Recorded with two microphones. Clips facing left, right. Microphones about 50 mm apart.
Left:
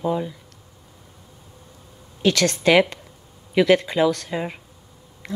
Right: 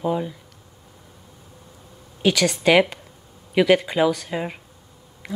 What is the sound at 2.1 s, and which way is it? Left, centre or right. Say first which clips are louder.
Speech: even; centre.